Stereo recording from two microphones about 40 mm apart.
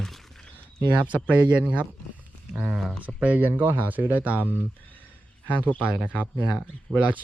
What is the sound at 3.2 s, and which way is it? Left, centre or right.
Speech, right.